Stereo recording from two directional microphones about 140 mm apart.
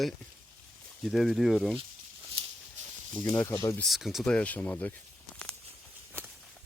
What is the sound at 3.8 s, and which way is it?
Speech, centre (ahead or behind).